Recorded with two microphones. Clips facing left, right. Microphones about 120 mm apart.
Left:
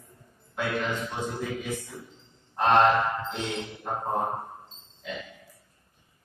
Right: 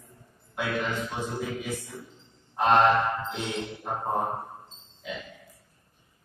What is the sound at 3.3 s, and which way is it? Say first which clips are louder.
Music: even; 10° right (ahead or behind).